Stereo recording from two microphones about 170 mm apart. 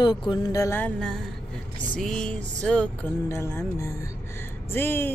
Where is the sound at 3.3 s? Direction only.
15° left (ahead or behind).